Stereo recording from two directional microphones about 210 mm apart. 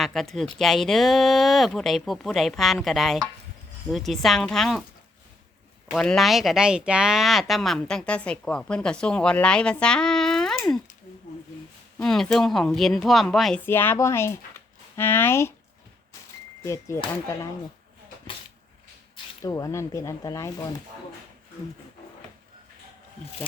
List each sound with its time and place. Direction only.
0.0 s speech: centre (ahead or behind)
5.9 s speech: centre (ahead or behind)
11.9 s speech: centre (ahead or behind)
16.6 s speech: 15° left (ahead or behind)
19.1 s speech: 15° left (ahead or behind)